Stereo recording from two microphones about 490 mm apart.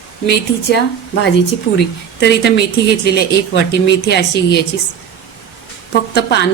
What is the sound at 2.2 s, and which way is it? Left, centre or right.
A woman's voice, centre.